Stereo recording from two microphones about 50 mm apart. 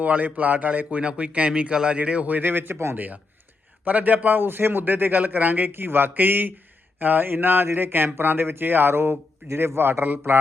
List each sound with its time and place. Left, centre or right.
0.0 s a man's voice: right